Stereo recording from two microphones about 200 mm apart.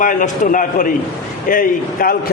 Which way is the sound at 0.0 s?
40° left (ahead or behind).